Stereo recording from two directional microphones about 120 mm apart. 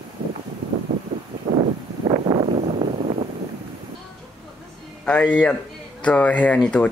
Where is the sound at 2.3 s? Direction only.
30° right (ahead or behind).